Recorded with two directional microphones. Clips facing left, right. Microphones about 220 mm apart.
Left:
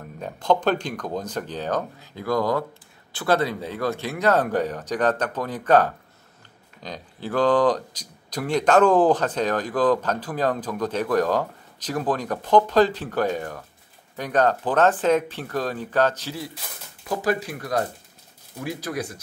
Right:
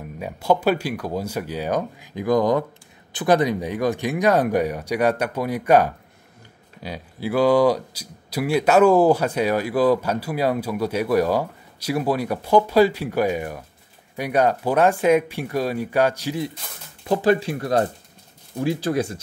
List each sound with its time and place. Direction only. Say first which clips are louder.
0.0 s speech: right 2 dB; 10° right (ahead or behind); by 19.1 s 25° right (ahead or behind)